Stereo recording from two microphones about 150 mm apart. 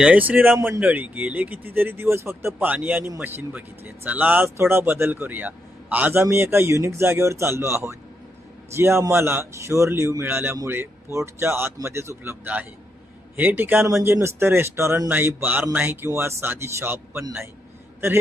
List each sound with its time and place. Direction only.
0.0 s speech: 10° right (ahead or behind)